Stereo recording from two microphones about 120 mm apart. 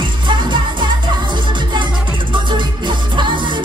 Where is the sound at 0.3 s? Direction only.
40° right (ahead or behind).